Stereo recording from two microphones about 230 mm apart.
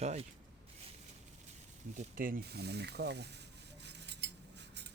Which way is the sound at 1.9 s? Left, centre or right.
Right.